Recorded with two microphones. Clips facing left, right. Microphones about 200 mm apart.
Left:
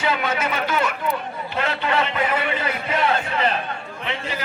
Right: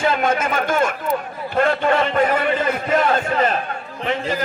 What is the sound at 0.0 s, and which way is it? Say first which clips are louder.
A man's voice: right 4 dB; 50° right (ahead or behind).